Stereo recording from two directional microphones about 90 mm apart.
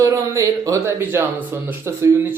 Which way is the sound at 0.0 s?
35° right (ahead or behind).